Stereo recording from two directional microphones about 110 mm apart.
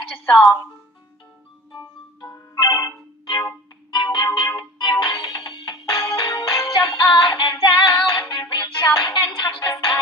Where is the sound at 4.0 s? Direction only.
40° left (ahead or behind).